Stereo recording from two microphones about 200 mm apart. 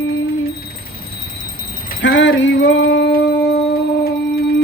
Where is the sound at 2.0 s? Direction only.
65° left (ahead or behind).